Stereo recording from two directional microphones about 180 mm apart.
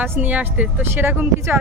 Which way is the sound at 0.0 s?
10° right (ahead or behind).